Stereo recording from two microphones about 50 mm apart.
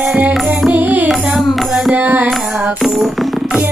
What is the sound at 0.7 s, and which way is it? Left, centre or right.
Carnatic music, right.